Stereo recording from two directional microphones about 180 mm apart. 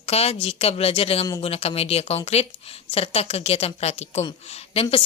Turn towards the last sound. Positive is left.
turn(degrees=30)  # may be behind; listen again after turning